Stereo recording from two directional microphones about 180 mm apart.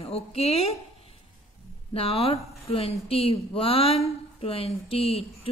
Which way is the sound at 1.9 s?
35° left (ahead or behind).